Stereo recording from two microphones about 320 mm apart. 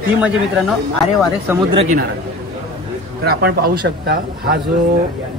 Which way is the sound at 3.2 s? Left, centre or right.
Right.